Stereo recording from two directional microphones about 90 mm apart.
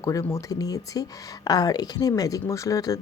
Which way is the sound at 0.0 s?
35° left (ahead or behind).